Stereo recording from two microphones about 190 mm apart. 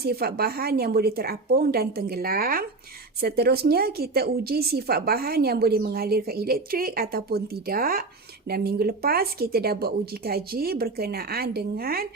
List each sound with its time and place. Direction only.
0.0 s a woman's voice: 55° right (ahead or behind)